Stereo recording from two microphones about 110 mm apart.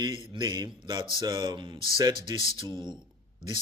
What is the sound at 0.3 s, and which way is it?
A man's voice, 35° right (ahead or behind).